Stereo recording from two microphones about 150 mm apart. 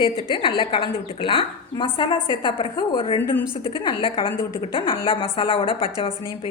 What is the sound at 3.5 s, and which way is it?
A woman's voice, 35° left (ahead or behind).